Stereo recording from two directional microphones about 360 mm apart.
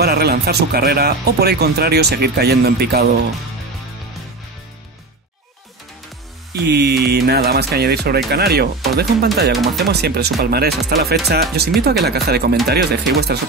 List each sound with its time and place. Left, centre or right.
0.0 s speech: right
6.7 s speech: right
9.5 s speech: centre
9.8 s speech: right